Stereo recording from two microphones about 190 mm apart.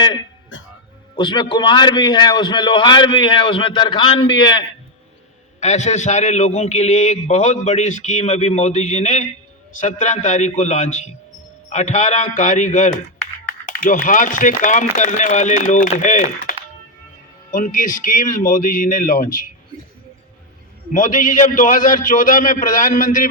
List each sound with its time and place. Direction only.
1.1 s a man's voice: 25° left (ahead or behind)
5.5 s a man's voice: 35° left (ahead or behind)
20.9 s a man's voice: 45° left (ahead or behind)